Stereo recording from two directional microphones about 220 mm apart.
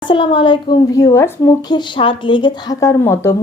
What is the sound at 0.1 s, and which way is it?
Speech, 20° left (ahead or behind).